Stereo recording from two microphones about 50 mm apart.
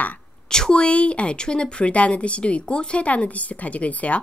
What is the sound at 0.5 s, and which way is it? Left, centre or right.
Speech, centre.